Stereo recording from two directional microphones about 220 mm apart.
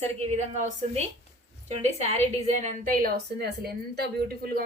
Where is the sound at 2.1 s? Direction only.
30° right (ahead or behind); by 4.1 s 45° right (ahead or behind).